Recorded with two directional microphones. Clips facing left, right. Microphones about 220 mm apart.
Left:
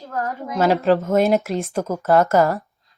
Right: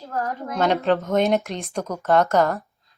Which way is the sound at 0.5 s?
5° left (ahead or behind).